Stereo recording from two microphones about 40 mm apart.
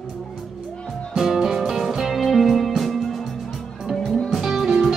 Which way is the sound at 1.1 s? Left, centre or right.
Centre.